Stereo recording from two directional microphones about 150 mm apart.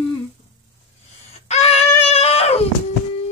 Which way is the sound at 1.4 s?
45° left (ahead or behind).